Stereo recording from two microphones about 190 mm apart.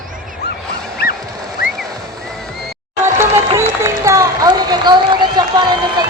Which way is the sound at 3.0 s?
15° right (ahead or behind).